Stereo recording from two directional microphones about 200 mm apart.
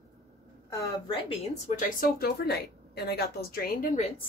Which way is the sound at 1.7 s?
50° left (ahead or behind).